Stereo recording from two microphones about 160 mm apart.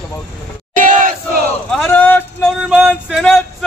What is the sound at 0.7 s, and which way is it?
Battle cry, 55° right (ahead or behind).